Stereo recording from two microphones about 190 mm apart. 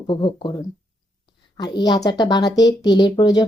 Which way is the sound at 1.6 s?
20° left (ahead or behind).